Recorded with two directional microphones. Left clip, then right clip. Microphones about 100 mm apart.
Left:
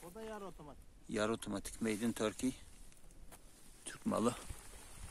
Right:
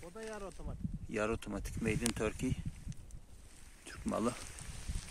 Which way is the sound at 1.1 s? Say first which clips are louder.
Right 1 dB; 5° right (ahead or behind).